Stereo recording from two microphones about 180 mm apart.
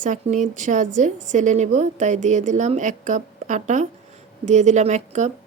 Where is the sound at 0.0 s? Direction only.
40° right (ahead or behind).